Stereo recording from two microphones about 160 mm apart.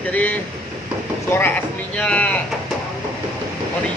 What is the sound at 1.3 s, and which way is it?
A man's voice, 15° left (ahead or behind).